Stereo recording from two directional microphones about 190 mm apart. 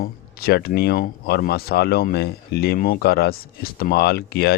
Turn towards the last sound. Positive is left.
turn(degrees=55)  # may be behind; listen again after turning